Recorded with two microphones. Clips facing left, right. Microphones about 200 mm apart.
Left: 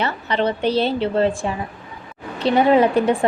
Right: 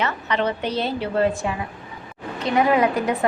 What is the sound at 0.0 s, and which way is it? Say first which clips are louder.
A woman's voice: left 2 dB; 30° left (ahead or behind).